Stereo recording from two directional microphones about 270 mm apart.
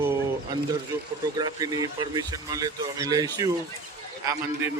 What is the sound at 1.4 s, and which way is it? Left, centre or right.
Speech, centre.